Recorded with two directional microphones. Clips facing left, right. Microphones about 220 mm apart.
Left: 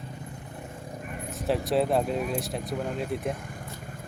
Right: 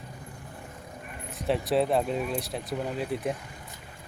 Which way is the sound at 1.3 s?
Centre (ahead or behind).